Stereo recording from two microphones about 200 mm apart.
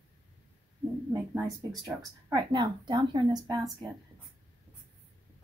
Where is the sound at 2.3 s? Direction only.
20° right (ahead or behind).